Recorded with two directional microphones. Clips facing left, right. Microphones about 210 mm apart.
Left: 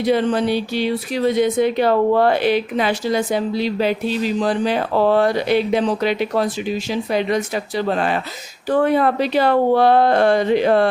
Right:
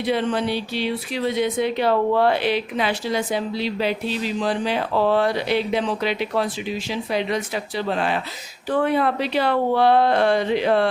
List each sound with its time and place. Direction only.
0.0 s speech: 40° left (ahead or behind)